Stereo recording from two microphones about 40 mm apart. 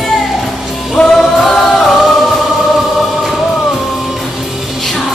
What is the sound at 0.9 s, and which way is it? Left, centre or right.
Music, centre.